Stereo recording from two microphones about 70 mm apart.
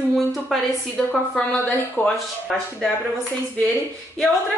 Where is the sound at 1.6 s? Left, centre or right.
Left.